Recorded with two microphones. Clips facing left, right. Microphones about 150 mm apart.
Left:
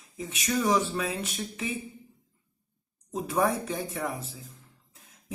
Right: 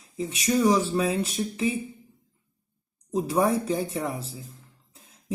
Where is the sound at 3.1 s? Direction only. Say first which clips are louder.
Right 4 dB; 30° right (ahead or behind).